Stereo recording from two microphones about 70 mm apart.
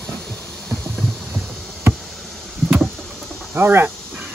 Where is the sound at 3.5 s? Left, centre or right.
Right.